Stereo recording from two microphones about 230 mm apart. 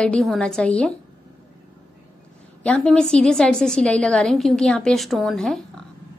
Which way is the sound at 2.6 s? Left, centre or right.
Centre.